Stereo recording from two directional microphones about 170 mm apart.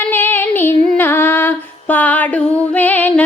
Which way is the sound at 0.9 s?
10° left (ahead or behind).